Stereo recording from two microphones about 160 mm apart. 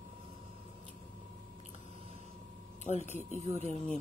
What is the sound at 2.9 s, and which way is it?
Speech, 45° left (ahead or behind).